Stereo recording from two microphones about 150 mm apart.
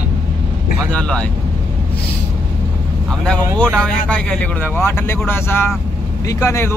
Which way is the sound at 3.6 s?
5° left (ahead or behind).